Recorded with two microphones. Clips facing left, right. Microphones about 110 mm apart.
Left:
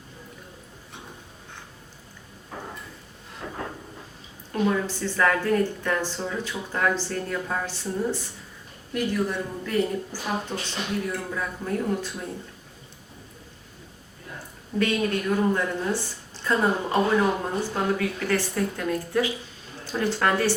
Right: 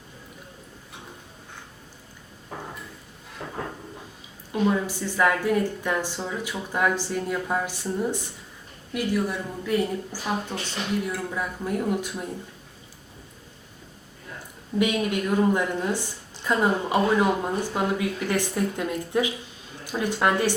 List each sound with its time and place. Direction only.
4.7 s a woman's voice: 15° right (ahead or behind)
14.8 s a woman's voice: 15° right (ahead or behind)